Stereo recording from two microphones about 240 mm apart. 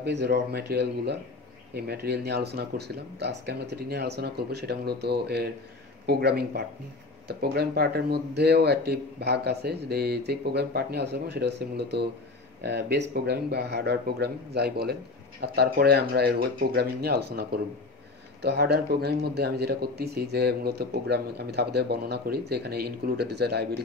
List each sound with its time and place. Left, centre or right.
0.0 s speech: right